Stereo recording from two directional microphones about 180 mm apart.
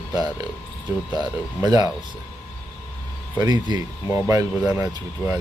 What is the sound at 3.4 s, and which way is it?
Speech, 20° right (ahead or behind).